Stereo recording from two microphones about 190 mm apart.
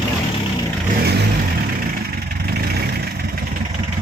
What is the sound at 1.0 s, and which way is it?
Vehicle, 55° right (ahead or behind).